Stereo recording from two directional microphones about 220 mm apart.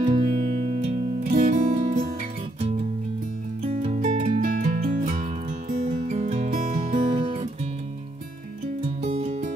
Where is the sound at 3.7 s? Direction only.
35° right (ahead or behind).